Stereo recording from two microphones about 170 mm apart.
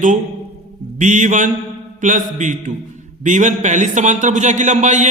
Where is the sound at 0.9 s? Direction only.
45° right (ahead or behind).